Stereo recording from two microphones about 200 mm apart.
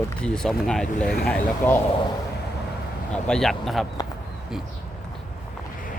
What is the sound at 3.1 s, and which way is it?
Speech, 5° left (ahead or behind).